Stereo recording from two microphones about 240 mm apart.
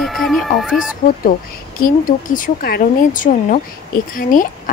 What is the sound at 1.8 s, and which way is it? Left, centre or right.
A woman's voice, left.